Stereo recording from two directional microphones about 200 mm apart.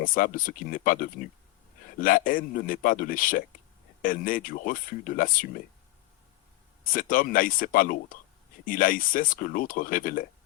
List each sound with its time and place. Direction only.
0.0 s speech: 45° left (ahead or behind)
6.9 s speech: 45° left (ahead or behind)